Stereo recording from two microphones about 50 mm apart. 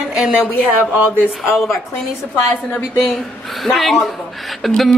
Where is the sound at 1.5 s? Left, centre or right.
Centre.